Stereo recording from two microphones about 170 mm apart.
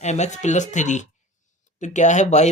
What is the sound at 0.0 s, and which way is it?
Speech, 40° left (ahead or behind).